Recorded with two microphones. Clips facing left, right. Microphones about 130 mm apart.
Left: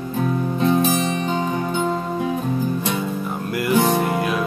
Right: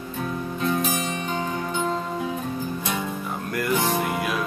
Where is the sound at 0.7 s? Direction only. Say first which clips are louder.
Left 7 dB; 30° left (ahead or behind).